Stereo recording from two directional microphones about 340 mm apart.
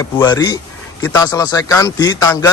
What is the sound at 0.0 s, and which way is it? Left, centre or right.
A man's voice, centre.